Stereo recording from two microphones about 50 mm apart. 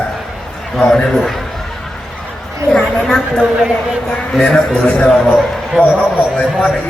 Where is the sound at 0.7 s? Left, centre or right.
Centre.